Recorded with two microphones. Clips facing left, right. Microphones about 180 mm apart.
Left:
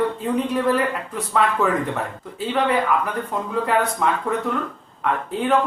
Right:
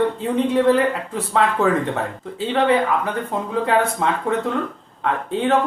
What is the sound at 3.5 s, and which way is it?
A woman's voice, 30° right (ahead or behind).